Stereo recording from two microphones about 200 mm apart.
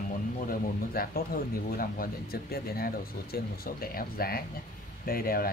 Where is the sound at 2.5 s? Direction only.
50° left (ahead or behind).